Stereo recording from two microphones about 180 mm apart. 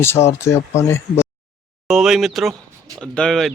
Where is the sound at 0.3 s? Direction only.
15° left (ahead or behind).